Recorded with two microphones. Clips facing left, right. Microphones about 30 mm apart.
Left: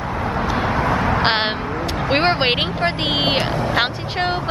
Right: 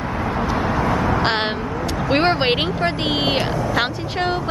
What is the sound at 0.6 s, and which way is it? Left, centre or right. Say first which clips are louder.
Vehicle: left 1 dB; left.